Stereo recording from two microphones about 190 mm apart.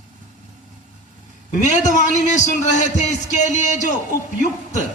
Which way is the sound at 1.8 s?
40° left (ahead or behind).